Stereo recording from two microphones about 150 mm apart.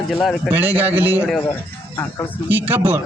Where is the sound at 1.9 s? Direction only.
15° left (ahead or behind).